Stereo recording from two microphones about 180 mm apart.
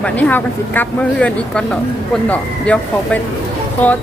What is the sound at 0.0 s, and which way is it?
Speech, 10° left (ahead or behind).